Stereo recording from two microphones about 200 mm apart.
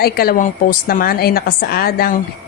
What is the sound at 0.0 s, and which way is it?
A woman's voice, 50° left (ahead or behind).